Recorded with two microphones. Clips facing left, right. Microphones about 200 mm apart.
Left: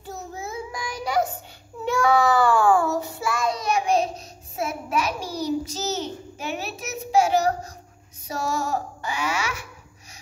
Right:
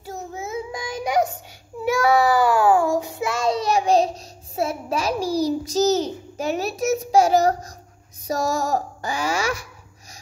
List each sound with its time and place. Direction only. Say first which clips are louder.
0.0 s child singing: right 2 dB; 15° right (ahead or behind)
3.4 s child singing: right 4 dB; 30° right (ahead or behind)
4.6 s a sound: right 2 dB; 30° right (ahead or behind)